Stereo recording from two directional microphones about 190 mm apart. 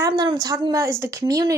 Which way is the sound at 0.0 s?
20° right (ahead or behind).